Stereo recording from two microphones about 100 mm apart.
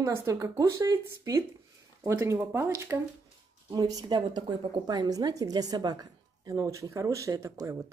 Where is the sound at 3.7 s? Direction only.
40° right (ahead or behind).